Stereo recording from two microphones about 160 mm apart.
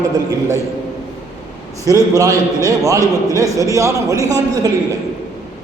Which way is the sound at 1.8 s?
20° right (ahead or behind).